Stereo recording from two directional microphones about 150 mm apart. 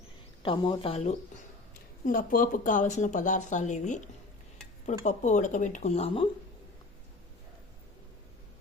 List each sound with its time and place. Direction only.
0.4 s a woman's voice: 35° left (ahead or behind)
2.0 s speech: 65° left (ahead or behind); by 6.2 s 45° left (ahead or behind)